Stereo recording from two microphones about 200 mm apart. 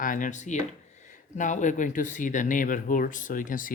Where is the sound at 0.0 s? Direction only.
40° left (ahead or behind).